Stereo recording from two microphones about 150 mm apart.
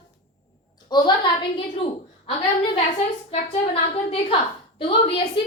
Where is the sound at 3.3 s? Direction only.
40° left (ahead or behind).